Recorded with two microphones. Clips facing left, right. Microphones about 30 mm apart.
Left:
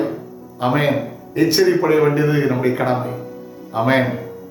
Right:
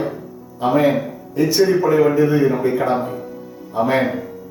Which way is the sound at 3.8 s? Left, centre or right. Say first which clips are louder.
Even; left.